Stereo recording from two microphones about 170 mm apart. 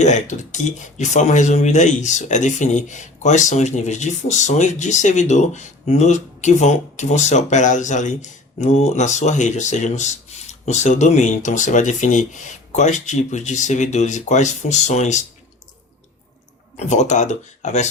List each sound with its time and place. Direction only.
0.0 s speech: 45° left (ahead or behind)
16.7 s speech: 40° left (ahead or behind)